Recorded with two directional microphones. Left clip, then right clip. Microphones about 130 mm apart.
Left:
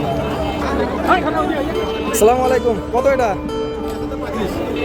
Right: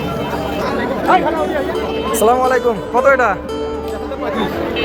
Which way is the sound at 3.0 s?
60° left (ahead or behind).